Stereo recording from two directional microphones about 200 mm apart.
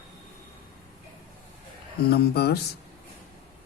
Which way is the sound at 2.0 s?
50° left (ahead or behind).